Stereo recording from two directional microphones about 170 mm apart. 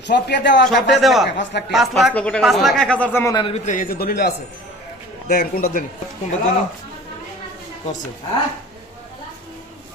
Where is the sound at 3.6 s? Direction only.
55° left (ahead or behind).